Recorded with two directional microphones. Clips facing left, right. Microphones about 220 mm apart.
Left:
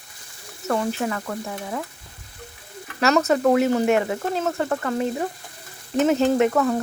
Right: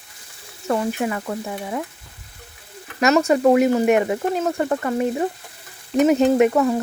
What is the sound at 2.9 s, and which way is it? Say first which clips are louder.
Speech: right 2 dB; 10° right (ahead or behind).